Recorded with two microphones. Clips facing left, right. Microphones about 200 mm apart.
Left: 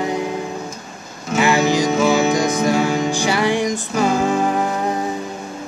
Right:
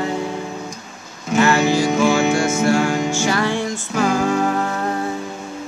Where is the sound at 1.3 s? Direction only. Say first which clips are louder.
Even; 15° left (ahead or behind).